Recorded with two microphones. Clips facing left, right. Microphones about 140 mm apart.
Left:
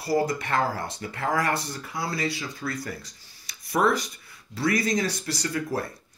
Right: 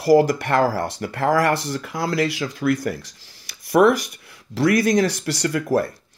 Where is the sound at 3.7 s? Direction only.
70° right (ahead or behind).